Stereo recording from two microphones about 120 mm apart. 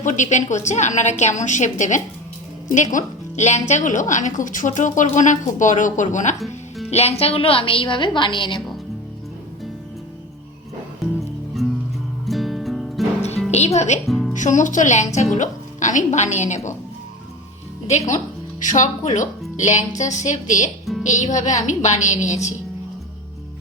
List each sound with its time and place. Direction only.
0.0 s a woman's voice: 90° left
6.4 s music: centre (ahead or behind)
6.9 s a woman's voice: 60° left (ahead or behind); by 8.6 s 40° left (ahead or behind)
11.0 s music: centre (ahead or behind)
13.7 s speech: 75° left (ahead or behind)
14.1 s music: centre (ahead or behind)
14.3 s speech: 90° left
18.6 s speech: 90° left
21.0 s a woman's voice: 80° left